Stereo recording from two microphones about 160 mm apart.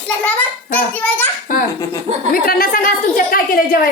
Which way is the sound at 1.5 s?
55° left (ahead or behind).